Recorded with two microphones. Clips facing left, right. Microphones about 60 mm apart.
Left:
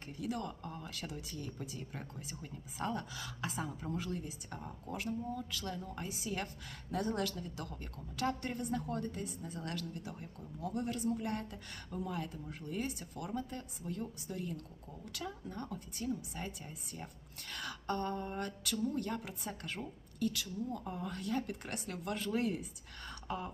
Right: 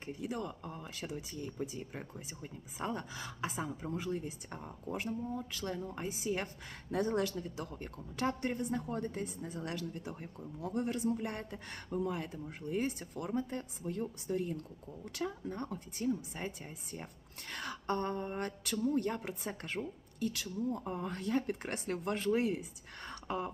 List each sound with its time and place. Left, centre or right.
0.2 s speech: centre
3.5 s speech: centre; by 9.6 s right
9.6 s speech: right
17.5 s speech: right
23.0 s a sound: right